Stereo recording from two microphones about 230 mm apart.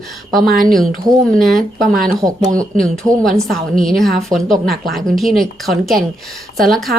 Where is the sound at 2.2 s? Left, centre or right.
Centre.